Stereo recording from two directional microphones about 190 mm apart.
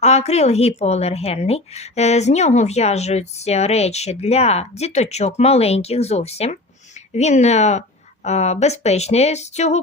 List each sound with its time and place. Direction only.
0.0 s speech: 35° left (ahead or behind)